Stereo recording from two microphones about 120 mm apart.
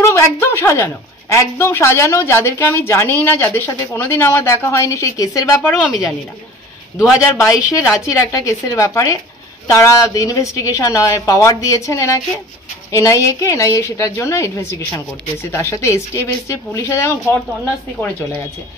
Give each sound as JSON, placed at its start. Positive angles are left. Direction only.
{"t": 0.0, "sound": "speech", "side_deg": 20}
{"t": 5.8, "sound": "speech", "side_deg": -5}
{"t": 7.0, "sound": "speech", "side_deg": 25}
{"t": 18.0, "sound": "speech", "side_deg": 15}